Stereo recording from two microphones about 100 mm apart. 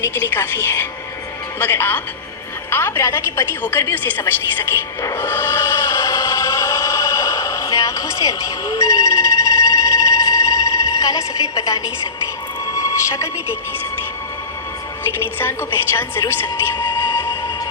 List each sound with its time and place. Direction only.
0.0 s a woman's voice: 20° left (ahead or behind)
5.0 s music: 25° left (ahead or behind)
11.5 s a woman's voice: 35° left (ahead or behind)
15.4 s a woman's voice: 20° left (ahead or behind)
16.7 s train: 50° left (ahead or behind)